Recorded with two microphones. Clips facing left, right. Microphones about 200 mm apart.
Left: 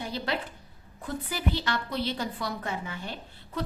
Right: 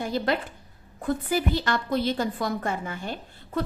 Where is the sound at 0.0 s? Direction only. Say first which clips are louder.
Right 6 dB; 45° right (ahead or behind).